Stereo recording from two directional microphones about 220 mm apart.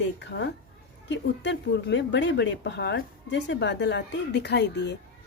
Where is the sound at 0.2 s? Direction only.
50° left (ahead or behind).